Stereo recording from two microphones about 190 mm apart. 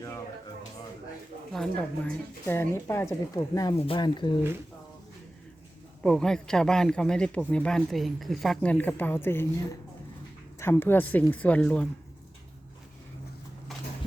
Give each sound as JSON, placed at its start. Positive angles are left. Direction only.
{"t": 1.5, "sound": "speech", "side_deg": 5}
{"t": 6.0, "sound": "a man's voice", "side_deg": 5}